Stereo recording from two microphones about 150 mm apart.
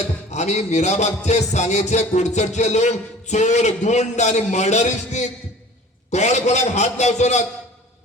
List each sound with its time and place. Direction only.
0.3 s music: 50° left (ahead or behind)